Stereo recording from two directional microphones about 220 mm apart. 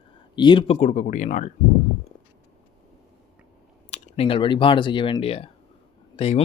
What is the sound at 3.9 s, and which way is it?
Speech, 25° left (ahead or behind).